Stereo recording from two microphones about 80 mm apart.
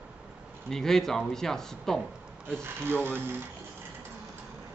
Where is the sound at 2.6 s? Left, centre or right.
Right.